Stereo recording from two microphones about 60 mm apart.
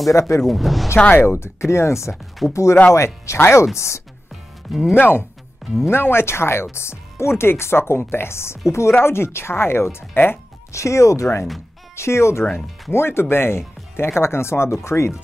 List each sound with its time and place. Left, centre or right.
0.1 s speech: left
0.4 s speech: centre
1.1 s speech: left
4.9 s speech: left
10.7 s speech: left
11.9 s speech: left